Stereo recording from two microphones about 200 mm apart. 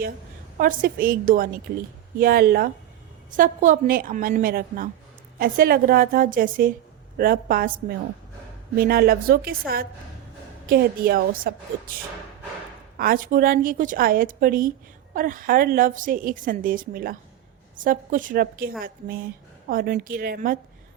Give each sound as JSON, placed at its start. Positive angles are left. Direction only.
{"t": 0.5, "sound": "a woman's voice", "side_deg": -45}
{"t": 13.0, "sound": "a woman's voice", "side_deg": -45}